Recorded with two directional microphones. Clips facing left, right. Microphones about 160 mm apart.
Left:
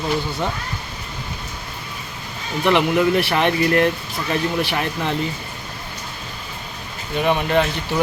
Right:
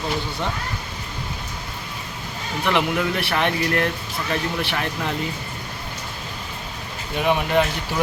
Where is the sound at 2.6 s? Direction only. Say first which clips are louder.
Left 5 dB; centre (ahead or behind).